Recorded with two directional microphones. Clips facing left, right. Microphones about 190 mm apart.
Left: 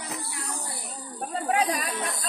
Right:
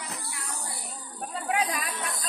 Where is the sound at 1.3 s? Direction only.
35° left (ahead or behind).